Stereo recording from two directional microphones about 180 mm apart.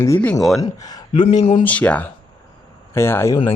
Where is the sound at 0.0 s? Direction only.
10° left (ahead or behind).